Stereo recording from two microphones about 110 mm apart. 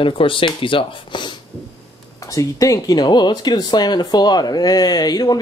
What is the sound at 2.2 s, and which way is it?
Speech, 30° left (ahead or behind).